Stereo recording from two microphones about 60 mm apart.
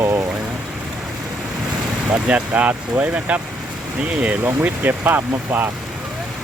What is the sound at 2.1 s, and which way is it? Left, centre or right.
Speech, right.